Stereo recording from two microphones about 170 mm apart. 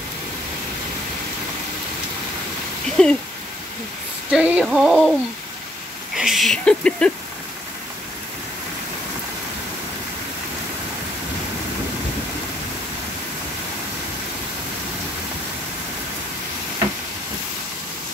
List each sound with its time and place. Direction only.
3.0 s speech: 5° left (ahead or behind)
4.3 s speech: 5° right (ahead or behind)
6.1 s speech: centre (ahead or behind)